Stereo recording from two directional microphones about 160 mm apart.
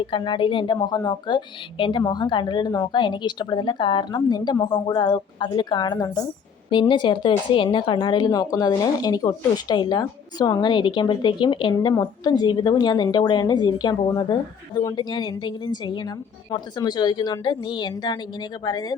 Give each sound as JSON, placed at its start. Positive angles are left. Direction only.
{"t": 0.1, "sound": "speech", "side_deg": 30}